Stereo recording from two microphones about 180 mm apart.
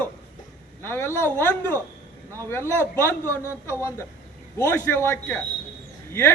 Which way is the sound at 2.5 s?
15° left (ahead or behind).